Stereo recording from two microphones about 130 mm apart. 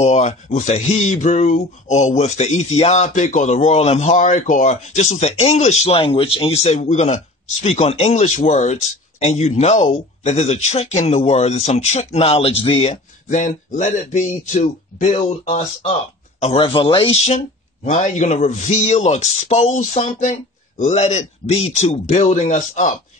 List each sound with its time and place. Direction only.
0.0 s speech: 60° left (ahead or behind)
12.9 s speech: 75° left (ahead or behind)
16.6 s speech: 45° left (ahead or behind)
17.8 s speech: 70° left (ahead or behind)
20.0 s speech: 80° left
20.8 s speech: 60° left (ahead or behind)